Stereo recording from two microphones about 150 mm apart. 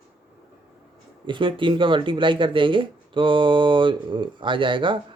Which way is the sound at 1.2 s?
35° right (ahead or behind).